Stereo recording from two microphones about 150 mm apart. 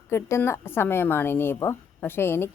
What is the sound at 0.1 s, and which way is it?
A woman's voice, 15° left (ahead or behind).